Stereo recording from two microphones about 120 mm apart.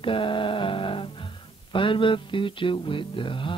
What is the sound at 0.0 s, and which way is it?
Speech, 45° left (ahead or behind).